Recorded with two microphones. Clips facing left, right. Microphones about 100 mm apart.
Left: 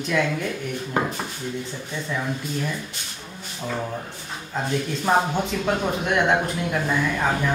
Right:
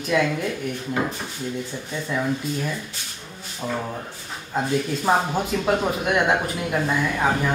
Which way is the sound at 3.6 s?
15° right (ahead or behind).